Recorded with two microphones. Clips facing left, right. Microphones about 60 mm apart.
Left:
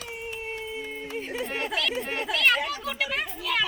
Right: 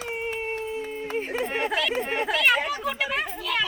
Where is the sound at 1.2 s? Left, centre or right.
Right.